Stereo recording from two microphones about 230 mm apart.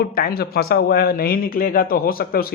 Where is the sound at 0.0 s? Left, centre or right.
Left.